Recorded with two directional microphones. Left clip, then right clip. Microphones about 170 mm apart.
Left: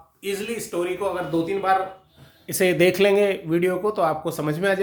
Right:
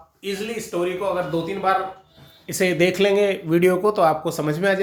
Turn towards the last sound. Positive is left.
turn(degrees=5)  # may be behind; listen again after turning